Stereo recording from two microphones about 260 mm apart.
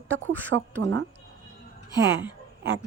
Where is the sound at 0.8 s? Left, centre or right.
Right.